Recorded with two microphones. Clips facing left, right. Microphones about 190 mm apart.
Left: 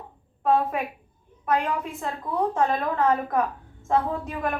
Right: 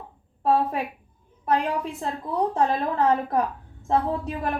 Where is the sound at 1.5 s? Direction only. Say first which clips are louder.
Right 1 dB; 35° right (ahead or behind).